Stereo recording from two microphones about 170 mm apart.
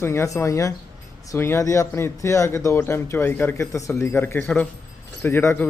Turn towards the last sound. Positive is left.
turn(degrees=15)  # may be behind; listen again after turning